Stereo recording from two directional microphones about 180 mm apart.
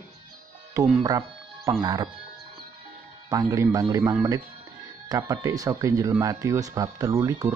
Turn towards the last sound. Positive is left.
turn(degrees=-15)  # may be behind; listen again after turning